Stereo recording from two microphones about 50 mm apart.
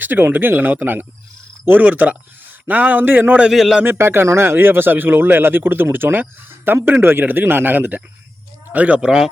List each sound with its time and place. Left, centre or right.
0.0 s a man's voice: right
3.5 s a man's voice: centre
3.8 s speech: right
9.0 s a man's voice: centre